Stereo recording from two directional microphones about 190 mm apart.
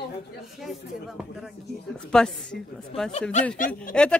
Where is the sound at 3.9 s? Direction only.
5° left (ahead or behind).